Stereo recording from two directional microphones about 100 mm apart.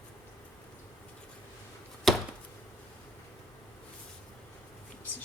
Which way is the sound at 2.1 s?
Centre (ahead or behind).